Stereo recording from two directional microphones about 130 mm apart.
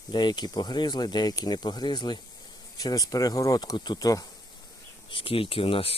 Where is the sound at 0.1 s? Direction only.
35° left (ahead or behind).